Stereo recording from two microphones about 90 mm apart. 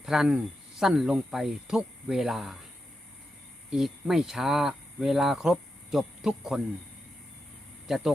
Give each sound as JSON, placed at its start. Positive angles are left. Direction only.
{"t": 0.0, "sound": "speech", "side_deg": -5}
{"t": 3.7, "sound": "speech", "side_deg": -5}
{"t": 7.9, "sound": "speech", "side_deg": -5}